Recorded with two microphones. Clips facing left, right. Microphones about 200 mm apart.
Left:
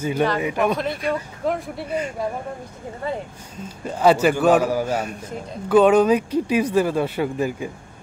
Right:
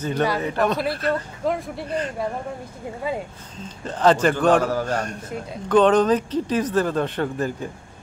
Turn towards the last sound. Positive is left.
turn(degrees=10)  # may be behind; listen again after turning